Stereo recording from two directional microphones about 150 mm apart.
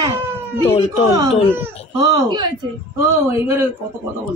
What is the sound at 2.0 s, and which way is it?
Speech, 30° right (ahead or behind).